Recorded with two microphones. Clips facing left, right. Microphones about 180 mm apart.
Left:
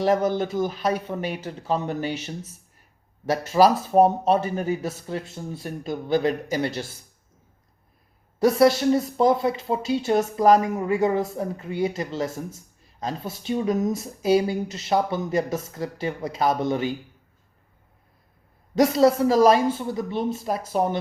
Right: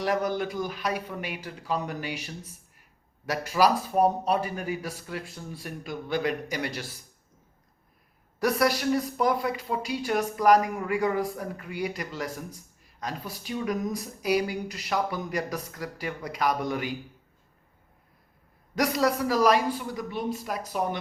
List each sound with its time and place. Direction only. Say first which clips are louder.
0.0 s speech: left 6 dB; 25° left (ahead or behind)
8.4 s speech: left 7 dB; 25° left (ahead or behind)
18.8 s speech: left 7 dB; 25° left (ahead or behind)